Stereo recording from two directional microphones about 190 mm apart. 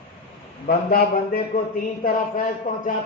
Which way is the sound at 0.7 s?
50° left (ahead or behind).